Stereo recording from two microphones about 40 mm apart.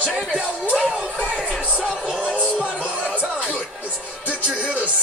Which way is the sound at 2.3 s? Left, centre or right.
Right.